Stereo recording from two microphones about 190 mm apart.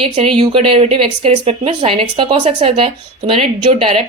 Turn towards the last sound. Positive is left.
turn(degrees=-30)  # may be behind; listen again after turning